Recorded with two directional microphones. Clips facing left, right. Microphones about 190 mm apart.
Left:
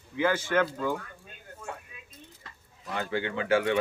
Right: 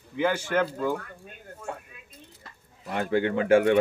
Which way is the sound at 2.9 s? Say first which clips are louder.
Right 6 dB; 50° right (ahead or behind).